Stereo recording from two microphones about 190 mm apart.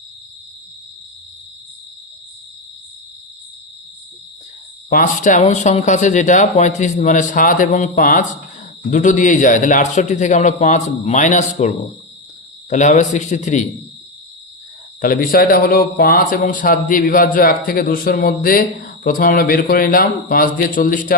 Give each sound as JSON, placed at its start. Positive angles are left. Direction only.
{"t": 4.9, "sound": "speech", "side_deg": 45}
{"t": 12.7, "sound": "speech", "side_deg": 40}
{"t": 15.0, "sound": "a man's voice", "side_deg": 50}